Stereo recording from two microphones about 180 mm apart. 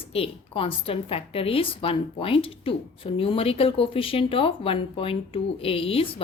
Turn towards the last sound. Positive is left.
turn(degrees=30)  # may be behind; listen again after turning